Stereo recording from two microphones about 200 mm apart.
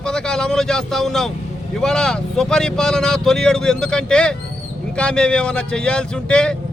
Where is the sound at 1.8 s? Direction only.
5° left (ahead or behind).